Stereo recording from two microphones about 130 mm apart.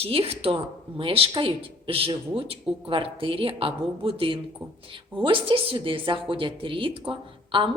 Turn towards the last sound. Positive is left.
turn(degrees=-45)  # may be behind; listen again after turning